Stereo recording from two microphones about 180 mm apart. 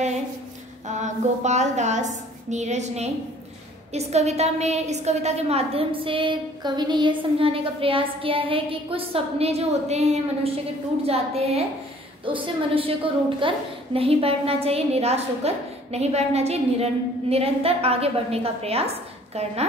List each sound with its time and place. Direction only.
0.8 s a woman's voice: 40° right (ahead or behind)